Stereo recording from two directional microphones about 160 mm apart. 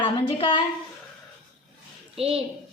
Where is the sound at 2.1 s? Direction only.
40° right (ahead or behind).